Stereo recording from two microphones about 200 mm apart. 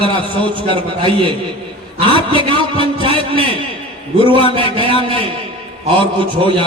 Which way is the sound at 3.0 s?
25° right (ahead or behind).